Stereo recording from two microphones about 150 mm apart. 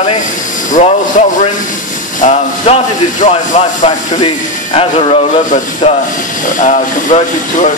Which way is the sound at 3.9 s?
40° left (ahead or behind).